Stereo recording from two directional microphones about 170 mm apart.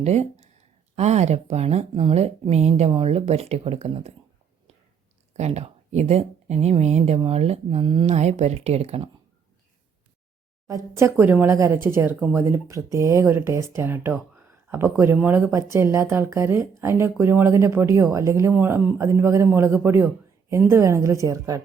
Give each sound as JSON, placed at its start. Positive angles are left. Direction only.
{"t": 0.0, "sound": "speech", "side_deg": -40}
{"t": 5.4, "sound": "speech", "side_deg": -40}
{"t": 10.7, "sound": "speech", "side_deg": -15}